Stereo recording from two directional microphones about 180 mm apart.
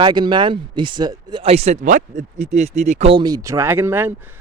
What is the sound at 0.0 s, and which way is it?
Speech, 25° right (ahead or behind).